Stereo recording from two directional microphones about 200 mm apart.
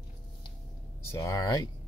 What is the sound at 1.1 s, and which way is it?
Speech, 15° left (ahead or behind).